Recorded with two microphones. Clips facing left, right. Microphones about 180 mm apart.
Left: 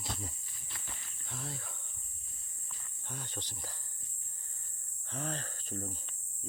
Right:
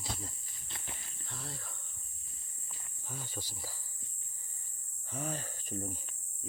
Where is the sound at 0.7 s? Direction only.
20° right (ahead or behind).